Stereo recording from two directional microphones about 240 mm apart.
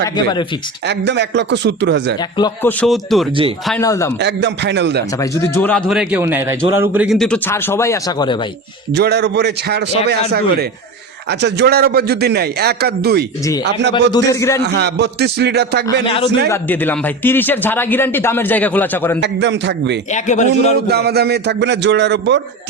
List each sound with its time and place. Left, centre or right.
0.0 s speech: centre
0.9 s speech: right
2.8 s a man's voice: centre
3.8 s speech: centre
4.2 s speech: right
5.5 s a man's voice: centre
9.0 s a man's voice: right
14.1 s speech: centre
14.6 s speech: right
16.0 s a man's voice: left
16.5 s speech: centre
19.2 s speech: right
20.1 s a man's voice: left
20.8 s speech: right